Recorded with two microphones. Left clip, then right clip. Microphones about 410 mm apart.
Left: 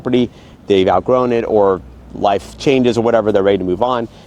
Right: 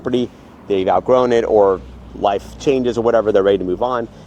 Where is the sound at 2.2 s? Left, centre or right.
Left.